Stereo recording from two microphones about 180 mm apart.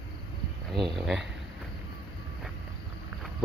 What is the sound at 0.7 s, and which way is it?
Speech, centre (ahead or behind).